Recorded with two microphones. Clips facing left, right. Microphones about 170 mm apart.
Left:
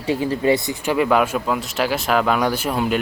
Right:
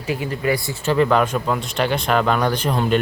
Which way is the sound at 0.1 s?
30° left (ahead or behind).